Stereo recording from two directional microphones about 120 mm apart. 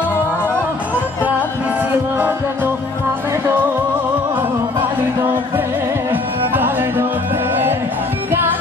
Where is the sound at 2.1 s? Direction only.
20° right (ahead or behind).